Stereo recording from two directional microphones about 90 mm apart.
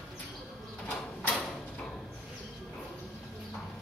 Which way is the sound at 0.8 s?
15° left (ahead or behind).